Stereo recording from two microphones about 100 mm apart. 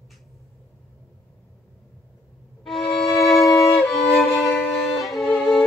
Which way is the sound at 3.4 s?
35° left (ahead or behind).